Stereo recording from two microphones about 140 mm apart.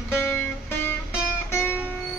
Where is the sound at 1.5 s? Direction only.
15° left (ahead or behind).